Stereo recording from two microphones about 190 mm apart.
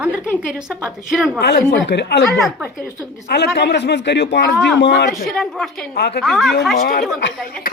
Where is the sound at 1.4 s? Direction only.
60° left (ahead or behind).